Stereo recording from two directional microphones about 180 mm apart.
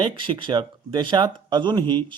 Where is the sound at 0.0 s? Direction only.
30° right (ahead or behind).